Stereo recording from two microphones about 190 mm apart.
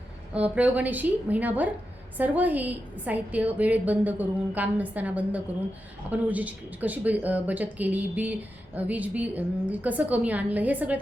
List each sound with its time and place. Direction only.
0.3 s speech: 5° right (ahead or behind)